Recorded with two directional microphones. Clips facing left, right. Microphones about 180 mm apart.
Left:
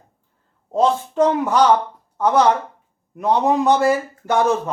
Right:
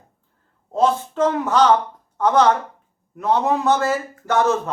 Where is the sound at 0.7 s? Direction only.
15° left (ahead or behind).